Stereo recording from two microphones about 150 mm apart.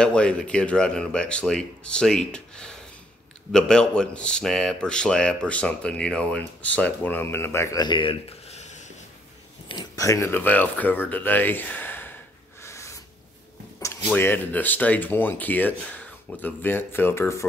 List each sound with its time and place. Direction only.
0.0 s speech: 5° left (ahead or behind); by 8.9 s 50° left (ahead or behind)
9.7 s speech: 25° left (ahead or behind)
12.6 s a sound: 20° left (ahead or behind)
13.7 s speech: 20° left (ahead or behind)